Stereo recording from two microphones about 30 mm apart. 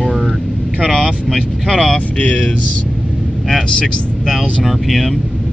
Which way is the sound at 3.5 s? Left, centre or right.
Centre.